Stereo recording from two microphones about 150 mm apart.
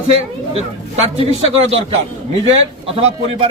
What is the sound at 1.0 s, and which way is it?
Speech, 45° right (ahead or behind).